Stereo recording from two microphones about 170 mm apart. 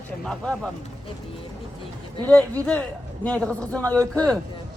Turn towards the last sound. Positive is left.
turn(degrees=5)  # may be behind; listen again after turning